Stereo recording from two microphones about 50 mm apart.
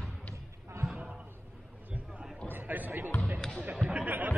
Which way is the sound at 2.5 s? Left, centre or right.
Right.